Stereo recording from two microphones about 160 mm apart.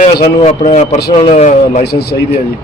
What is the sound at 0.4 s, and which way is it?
A man's voice, 45° left (ahead or behind).